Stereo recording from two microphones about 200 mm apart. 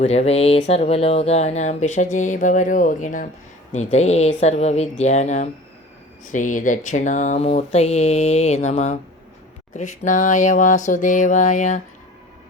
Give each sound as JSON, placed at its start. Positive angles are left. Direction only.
{"t": 0.0, "sound": "speech", "side_deg": 35}